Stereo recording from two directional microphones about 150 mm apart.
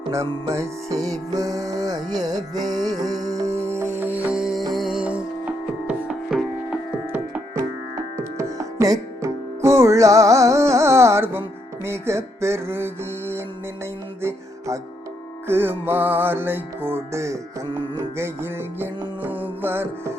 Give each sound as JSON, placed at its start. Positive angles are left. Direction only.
{"t": 0.5, "sound": "music", "side_deg": -20}
{"t": 3.4, "sound": "music", "side_deg": -45}
{"t": 3.7, "sound": "music", "side_deg": -15}
{"t": 7.9, "sound": "music", "side_deg": -20}
{"t": 14.2, "sound": "music", "side_deg": -15}